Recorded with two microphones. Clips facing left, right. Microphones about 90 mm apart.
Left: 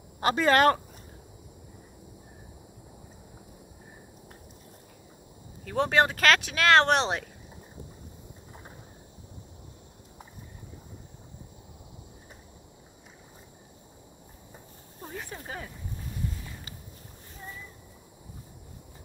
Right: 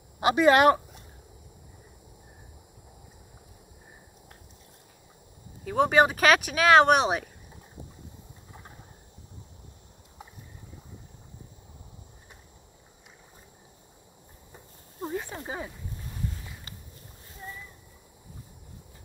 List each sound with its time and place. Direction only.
0.2 s speech: 15° right (ahead or behind)
5.7 s speech: 5° right (ahead or behind)
15.1 s speech: 20° right (ahead or behind)